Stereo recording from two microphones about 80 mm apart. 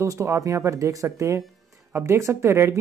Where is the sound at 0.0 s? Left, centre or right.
Right.